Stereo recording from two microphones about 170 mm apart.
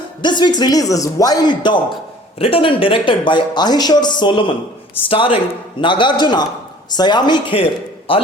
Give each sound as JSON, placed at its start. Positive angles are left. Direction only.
{"t": 0.2, "sound": "speech", "side_deg": 25}